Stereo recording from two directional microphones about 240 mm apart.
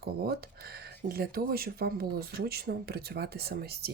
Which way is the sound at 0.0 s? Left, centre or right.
Right.